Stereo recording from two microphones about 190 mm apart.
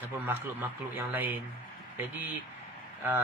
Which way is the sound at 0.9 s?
10° right (ahead or behind).